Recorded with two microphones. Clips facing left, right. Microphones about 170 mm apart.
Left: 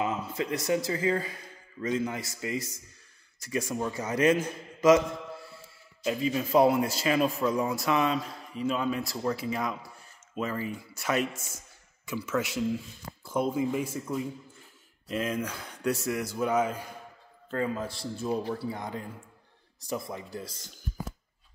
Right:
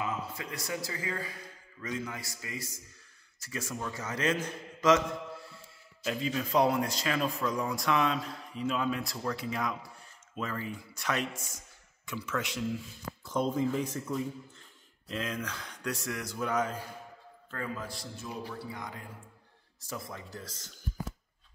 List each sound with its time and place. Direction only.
0.0 s a man's voice: 20° left (ahead or behind)
6.0 s a man's voice: 5° left (ahead or behind)
17.6 s a man's voice: 25° left (ahead or behind)
19.8 s a man's voice: 15° left (ahead or behind)